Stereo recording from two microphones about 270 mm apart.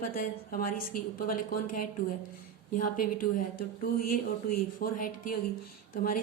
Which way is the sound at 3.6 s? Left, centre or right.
Left.